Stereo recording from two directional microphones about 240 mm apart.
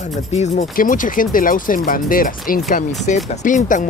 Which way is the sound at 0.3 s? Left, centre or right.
Left.